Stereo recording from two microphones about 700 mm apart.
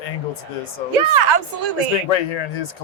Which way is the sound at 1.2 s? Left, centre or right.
Right.